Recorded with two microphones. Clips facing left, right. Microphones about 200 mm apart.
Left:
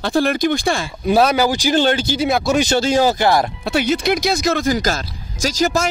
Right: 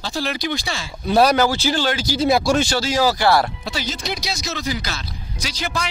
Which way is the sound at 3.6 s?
60° left (ahead or behind).